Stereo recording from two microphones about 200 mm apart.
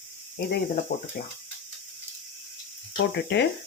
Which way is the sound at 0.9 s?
45° left (ahead or behind).